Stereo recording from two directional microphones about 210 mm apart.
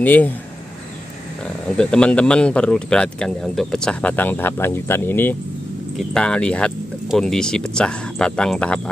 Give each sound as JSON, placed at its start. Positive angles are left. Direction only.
{"t": 0.0, "sound": "speech", "side_deg": 10}
{"t": 1.8, "sound": "speech", "side_deg": 5}